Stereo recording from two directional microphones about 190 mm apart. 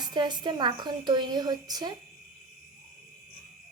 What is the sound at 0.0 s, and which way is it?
Speech, 25° right (ahead or behind).